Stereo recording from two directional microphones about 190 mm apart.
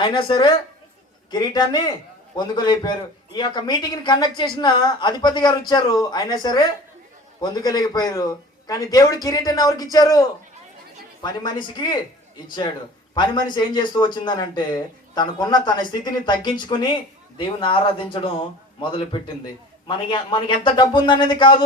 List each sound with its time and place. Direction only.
0.0 s a man's voice: 25° left (ahead or behind)
13.1 s a man's voice: 25° left (ahead or behind)